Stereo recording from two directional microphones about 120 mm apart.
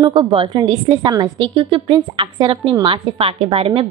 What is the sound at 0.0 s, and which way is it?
A woman's voice, 45° right (ahead or behind).